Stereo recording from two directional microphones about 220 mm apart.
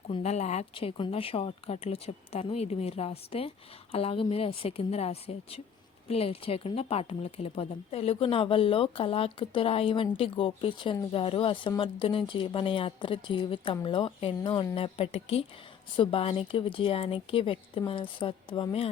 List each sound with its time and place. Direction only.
0.1 s speech: 30° left (ahead or behind)